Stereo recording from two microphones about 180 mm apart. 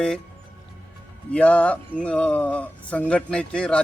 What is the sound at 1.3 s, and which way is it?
Speech, 10° left (ahead or behind).